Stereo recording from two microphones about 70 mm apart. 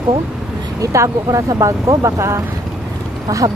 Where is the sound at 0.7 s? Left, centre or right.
Right.